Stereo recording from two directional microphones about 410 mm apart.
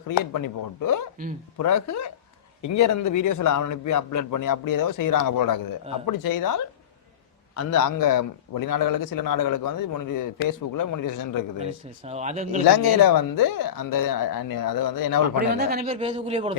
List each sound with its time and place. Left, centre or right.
0.2 s a man's voice: left
12.0 s speech: centre
12.6 s a man's voice: left
15.5 s speech: right